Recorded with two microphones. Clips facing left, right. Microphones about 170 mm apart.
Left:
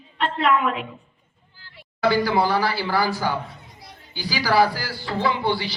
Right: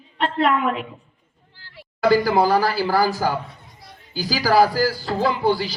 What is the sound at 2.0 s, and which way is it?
A woman's voice, 40° right (ahead or behind).